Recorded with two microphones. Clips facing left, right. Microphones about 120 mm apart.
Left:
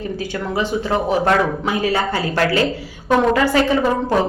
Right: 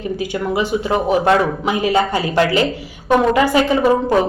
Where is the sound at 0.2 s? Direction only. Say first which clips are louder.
Right 3 dB; 15° right (ahead or behind).